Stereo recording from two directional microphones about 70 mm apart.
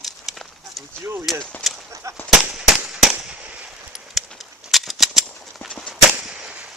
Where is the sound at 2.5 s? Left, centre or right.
Centre.